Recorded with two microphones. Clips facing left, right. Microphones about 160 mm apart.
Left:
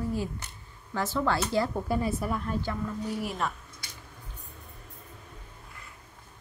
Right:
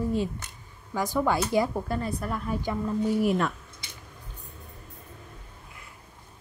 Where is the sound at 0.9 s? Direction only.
10° right (ahead or behind).